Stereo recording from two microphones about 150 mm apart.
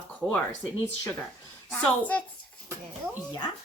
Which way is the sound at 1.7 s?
5° left (ahead or behind).